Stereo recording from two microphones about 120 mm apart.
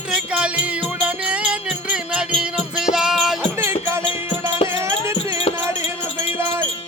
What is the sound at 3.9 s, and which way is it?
Music, 20° right (ahead or behind).